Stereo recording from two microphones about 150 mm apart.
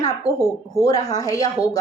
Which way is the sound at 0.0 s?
25° left (ahead or behind).